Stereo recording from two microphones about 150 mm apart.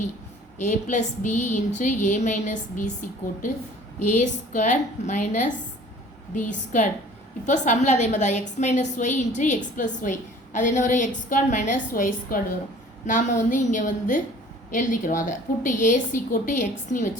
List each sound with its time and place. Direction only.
0.6 s a woman's voice: 55° left (ahead or behind)